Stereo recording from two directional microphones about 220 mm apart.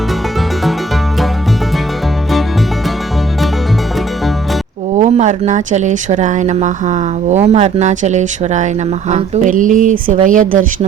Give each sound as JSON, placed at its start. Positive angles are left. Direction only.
{"t": 4.9, "sound": "speech", "side_deg": -30}